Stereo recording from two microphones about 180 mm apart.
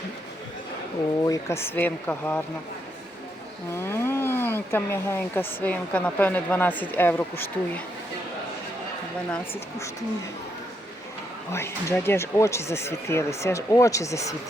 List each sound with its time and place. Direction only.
1.2 s speech: 15° left (ahead or behind)
3.8 s speech: 15° left (ahead or behind)
11.5 s speech: 15° left (ahead or behind)